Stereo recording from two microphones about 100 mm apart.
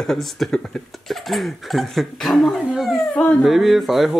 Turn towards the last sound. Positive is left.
turn(degrees=0)  # may be behind; listen again after turning